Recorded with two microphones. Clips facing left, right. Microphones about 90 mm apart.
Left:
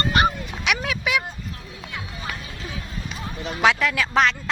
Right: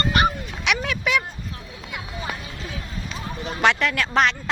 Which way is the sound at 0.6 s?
Centre (ahead or behind).